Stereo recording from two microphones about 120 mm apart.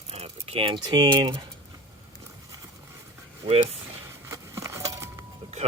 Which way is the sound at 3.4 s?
55° right (ahead or behind).